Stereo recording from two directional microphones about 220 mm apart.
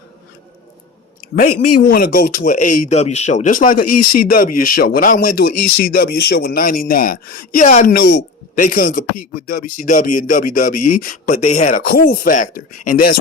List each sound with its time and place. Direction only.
1.5 s speech: 90° left
1.9 s speech: 40° left (ahead or behind)